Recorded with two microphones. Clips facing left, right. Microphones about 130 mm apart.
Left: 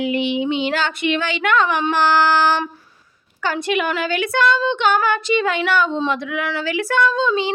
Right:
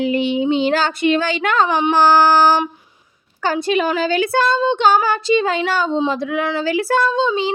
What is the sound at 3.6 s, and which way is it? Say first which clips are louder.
Speech: right 3 dB; 30° right (ahead or behind).